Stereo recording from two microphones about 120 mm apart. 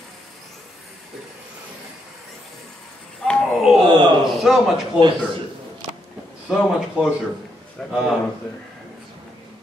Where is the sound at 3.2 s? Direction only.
Centre (ahead or behind).